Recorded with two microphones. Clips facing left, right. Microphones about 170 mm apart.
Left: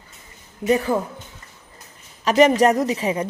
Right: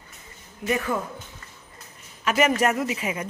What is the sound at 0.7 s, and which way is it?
Speech, 30° left (ahead or behind).